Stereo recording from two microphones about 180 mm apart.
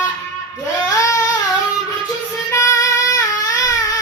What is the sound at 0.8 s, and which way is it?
Baby cry, 20° left (ahead or behind).